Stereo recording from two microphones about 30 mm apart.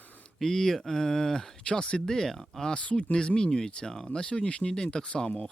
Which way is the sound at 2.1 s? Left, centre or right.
Centre.